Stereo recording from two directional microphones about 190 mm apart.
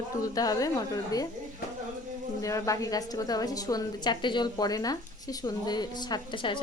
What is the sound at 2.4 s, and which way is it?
A woman's voice, 15° left (ahead or behind).